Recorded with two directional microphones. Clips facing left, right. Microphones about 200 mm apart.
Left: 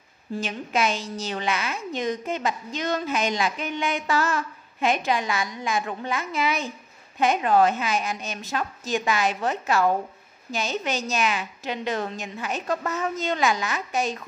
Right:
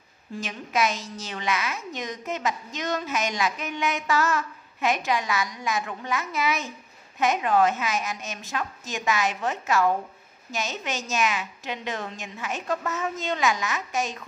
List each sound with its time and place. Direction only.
0.4 s a woman's voice: 30° left (ahead or behind)